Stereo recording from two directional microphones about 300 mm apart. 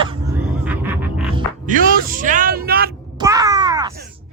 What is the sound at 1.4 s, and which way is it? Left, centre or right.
Music, right.